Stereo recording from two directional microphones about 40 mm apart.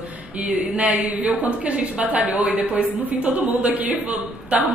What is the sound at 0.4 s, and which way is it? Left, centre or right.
A woman's voice, right.